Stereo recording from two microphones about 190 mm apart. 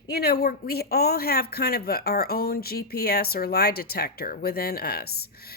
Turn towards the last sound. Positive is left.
turn(degrees=55)  # may be behind; listen again after turning